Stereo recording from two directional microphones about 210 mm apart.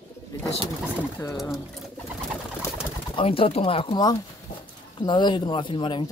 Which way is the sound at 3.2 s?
25° left (ahead or behind).